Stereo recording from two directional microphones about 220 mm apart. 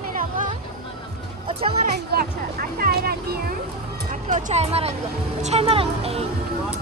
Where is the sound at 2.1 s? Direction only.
45° right (ahead or behind); by 6.2 s 25° right (ahead or behind).